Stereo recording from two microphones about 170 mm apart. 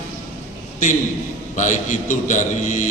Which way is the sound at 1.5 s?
45° left (ahead or behind).